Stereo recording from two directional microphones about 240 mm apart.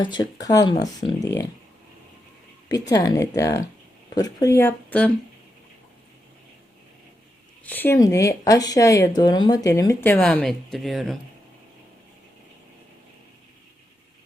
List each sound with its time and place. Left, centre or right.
0.0 s speech: centre
2.9 s speech: centre
7.6 s speech: centre